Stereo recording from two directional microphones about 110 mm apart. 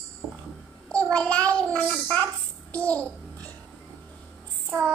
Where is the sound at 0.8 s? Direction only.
10° left (ahead or behind).